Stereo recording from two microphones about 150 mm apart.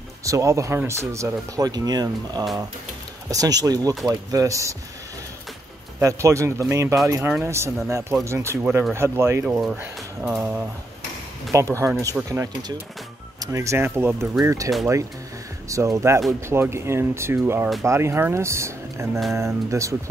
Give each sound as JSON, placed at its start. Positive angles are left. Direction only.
{"t": 0.2, "sound": "speech", "side_deg": -20}
{"t": 5.9, "sound": "speech", "side_deg": -20}
{"t": 11.8, "sound": "speech", "side_deg": -20}
{"t": 15.7, "sound": "speech", "side_deg": -20}